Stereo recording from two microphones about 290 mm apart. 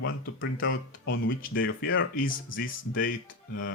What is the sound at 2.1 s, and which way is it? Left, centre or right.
Speech, left.